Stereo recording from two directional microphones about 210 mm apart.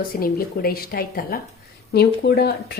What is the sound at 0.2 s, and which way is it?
Speech, 45° left (ahead or behind).